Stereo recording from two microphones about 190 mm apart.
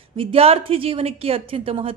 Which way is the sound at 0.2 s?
30° right (ahead or behind).